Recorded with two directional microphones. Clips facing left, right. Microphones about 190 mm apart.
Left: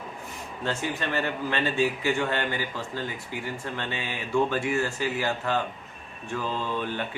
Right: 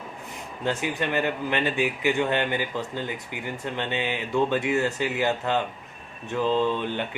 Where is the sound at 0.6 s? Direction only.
15° right (ahead or behind).